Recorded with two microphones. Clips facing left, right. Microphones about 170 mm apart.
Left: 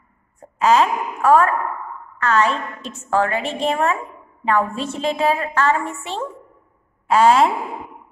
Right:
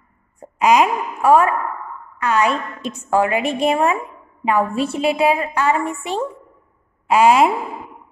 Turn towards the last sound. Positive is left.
turn(degrees=-10)  # may be behind; listen again after turning